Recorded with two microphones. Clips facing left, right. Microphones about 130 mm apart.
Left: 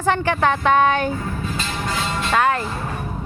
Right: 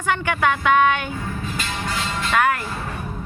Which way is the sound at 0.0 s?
35° left (ahead or behind).